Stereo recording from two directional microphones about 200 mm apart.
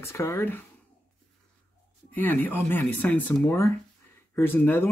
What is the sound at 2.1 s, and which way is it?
Speech, 10° left (ahead or behind).